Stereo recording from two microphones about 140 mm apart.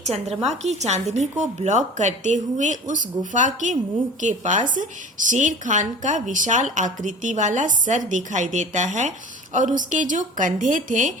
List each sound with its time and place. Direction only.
0.0 s a woman's voice: 50° right (ahead or behind); by 11.1 s 65° right (ahead or behind)